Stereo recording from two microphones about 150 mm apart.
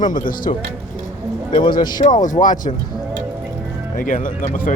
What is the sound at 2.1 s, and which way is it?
Speech, 55° left (ahead or behind).